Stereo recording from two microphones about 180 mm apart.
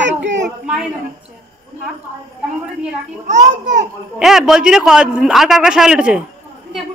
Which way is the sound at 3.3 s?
40° right (ahead or behind).